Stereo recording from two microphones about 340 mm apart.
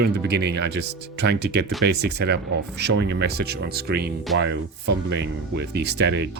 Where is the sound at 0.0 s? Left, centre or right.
Right.